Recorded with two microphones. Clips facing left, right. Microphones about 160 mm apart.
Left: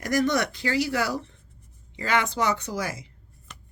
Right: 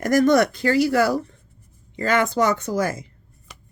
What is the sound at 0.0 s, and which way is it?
Speech, 50° right (ahead or behind).